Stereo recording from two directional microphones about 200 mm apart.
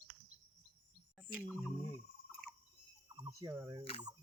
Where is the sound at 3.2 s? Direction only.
15° right (ahead or behind).